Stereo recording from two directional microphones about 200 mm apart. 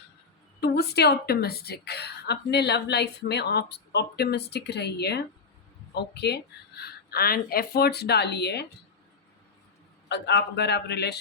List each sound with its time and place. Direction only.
0.6 s a woman's voice: 55° left (ahead or behind)
10.1 s a woman's voice: 55° left (ahead or behind)